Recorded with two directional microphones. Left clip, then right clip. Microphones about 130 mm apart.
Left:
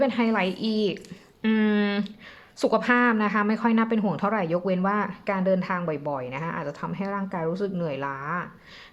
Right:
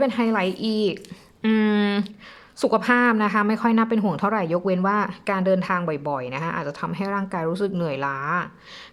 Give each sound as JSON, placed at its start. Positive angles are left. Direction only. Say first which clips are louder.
{"t": 0.0, "sound": "a woman's voice", "louder": "right 2 dB", "side_deg": -25}